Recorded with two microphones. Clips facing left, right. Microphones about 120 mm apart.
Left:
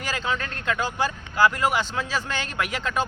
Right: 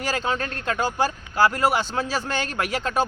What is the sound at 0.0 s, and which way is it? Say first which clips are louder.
Speech: right 3 dB; 40° right (ahead or behind).